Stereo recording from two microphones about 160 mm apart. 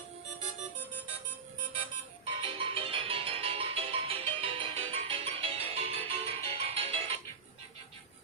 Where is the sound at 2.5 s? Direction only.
35° right (ahead or behind).